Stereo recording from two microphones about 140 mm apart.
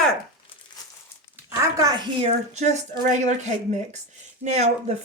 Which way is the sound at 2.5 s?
55° right (ahead or behind).